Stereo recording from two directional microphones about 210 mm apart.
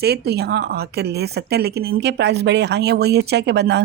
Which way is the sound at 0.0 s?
50° right (ahead or behind).